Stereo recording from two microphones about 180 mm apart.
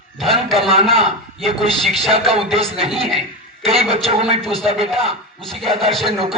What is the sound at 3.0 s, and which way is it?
Speech, 30° right (ahead or behind).